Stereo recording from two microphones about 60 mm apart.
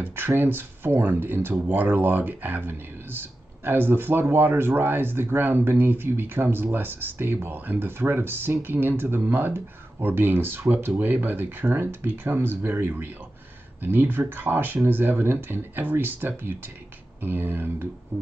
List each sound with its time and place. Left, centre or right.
0.0 s speech: right